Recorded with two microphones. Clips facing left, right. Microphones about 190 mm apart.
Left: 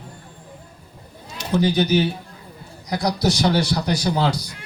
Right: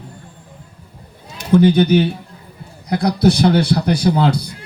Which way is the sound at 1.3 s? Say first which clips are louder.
Right 7 dB; 55° right (ahead or behind).